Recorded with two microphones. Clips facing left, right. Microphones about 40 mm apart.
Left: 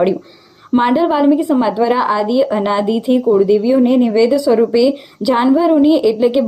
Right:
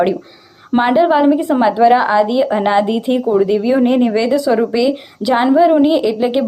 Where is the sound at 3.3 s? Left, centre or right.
Right.